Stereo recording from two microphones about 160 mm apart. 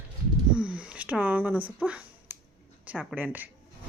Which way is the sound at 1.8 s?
10° right (ahead or behind).